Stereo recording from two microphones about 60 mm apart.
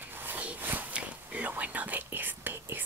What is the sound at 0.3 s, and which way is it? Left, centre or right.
Whispering, right.